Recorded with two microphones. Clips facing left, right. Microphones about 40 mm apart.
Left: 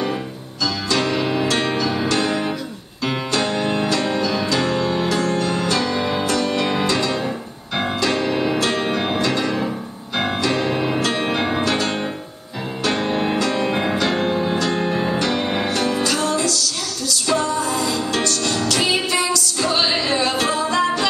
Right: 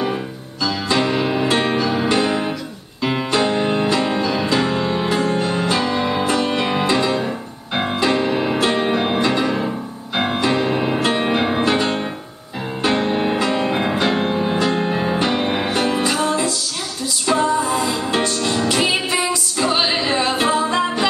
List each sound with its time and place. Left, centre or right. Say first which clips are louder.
0.8 s music: right 2 dB; centre
13.0 s music: right 1 dB; centre